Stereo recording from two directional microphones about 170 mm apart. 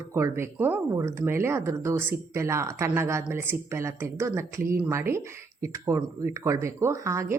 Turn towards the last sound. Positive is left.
turn(degrees=-15)  # may be behind; listen again after turning